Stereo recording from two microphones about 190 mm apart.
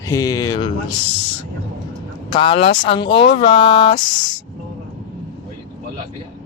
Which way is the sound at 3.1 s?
65° left (ahead or behind).